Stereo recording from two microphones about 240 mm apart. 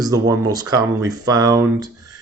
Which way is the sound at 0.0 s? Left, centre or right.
Centre.